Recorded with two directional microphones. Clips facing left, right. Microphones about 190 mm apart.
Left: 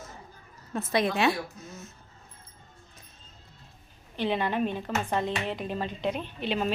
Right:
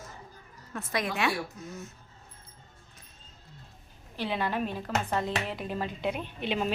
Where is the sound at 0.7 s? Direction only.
25° left (ahead or behind).